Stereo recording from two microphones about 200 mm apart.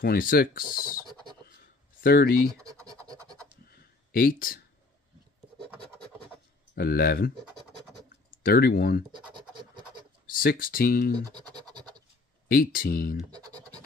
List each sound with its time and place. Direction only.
0.0 s speech: 45° left (ahead or behind)
2.0 s speech: 50° left (ahead or behind)
2.9 s scratch: 20° right (ahead or behind)
3.7 s a sound: 45° left (ahead or behind)
6.7 s speech: 50° left (ahead or behind)
9.1 s scratch: 20° right (ahead or behind)
10.3 s speech: 45° left (ahead or behind)
11.1 s scratch: 20° right (ahead or behind)
12.4 s speech: 45° left (ahead or behind)
13.3 s scratch: 20° right (ahead or behind)